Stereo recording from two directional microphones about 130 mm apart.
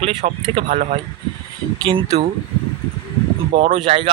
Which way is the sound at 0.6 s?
90° right.